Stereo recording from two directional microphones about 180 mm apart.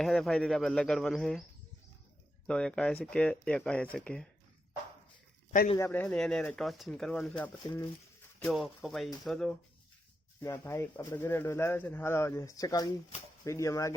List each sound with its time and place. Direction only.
0.0 s speech: centre (ahead or behind)
2.5 s speech: 5° left (ahead or behind)
5.7 s speech: 15° left (ahead or behind)
10.4 s speech: 15° left (ahead or behind)